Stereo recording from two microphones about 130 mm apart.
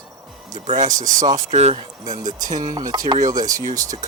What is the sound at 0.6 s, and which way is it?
Speech, 60° right (ahead or behind).